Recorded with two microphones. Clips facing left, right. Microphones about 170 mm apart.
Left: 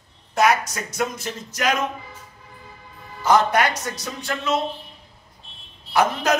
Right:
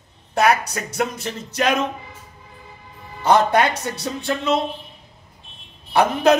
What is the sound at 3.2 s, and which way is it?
Speech, 25° right (ahead or behind).